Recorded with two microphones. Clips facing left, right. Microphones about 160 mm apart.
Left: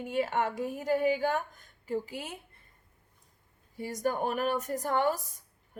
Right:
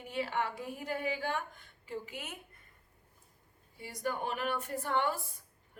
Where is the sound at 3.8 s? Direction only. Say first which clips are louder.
Left 6 dB; 45° left (ahead or behind).